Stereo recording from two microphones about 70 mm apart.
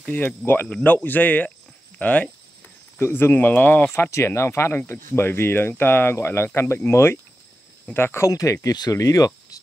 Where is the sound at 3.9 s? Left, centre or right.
Left.